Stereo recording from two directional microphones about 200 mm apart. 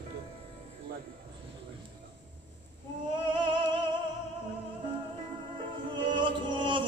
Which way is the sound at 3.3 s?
25° right (ahead or behind).